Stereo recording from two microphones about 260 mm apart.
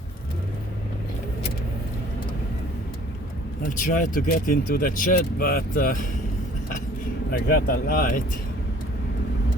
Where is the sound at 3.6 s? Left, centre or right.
Left.